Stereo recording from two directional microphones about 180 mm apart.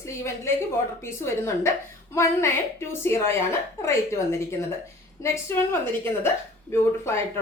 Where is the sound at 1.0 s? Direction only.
15° left (ahead or behind).